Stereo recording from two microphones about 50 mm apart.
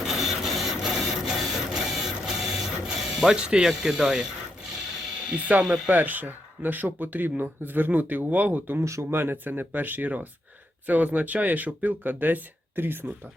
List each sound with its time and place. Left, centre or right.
0.0 s printer: centre
5.3 s speech: right
5.6 s speech: centre
5.9 s speech: right
8.8 s speech: right
9.0 s speech: right